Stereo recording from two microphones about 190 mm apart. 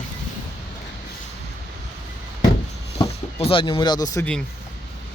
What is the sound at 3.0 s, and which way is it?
Speech, 30° left (ahead or behind).